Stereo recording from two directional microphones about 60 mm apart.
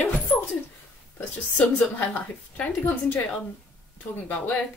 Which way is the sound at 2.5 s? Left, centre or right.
Left.